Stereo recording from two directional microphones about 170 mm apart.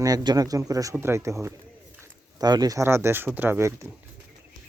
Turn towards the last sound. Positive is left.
turn(degrees=-15)  # may be behind; listen again after turning